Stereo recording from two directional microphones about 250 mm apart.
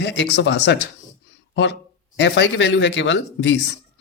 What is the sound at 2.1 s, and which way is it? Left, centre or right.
Speech, left.